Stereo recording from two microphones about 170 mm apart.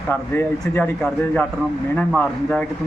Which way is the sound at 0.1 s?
10° left (ahead or behind).